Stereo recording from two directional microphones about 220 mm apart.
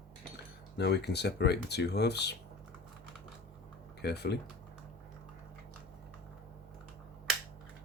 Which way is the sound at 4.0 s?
50° left (ahead or behind).